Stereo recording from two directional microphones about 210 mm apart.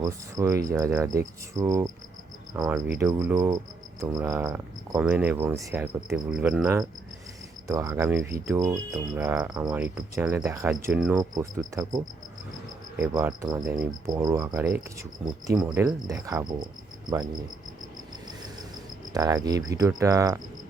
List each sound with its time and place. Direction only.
0.0 s speech: 15° right (ahead or behind)
2.5 s cricket: 15° right (ahead or behind)
2.7 s speech: 5° right (ahead or behind)
7.7 s speech: 15° right (ahead or behind)
19.1 s speech: 15° right (ahead or behind)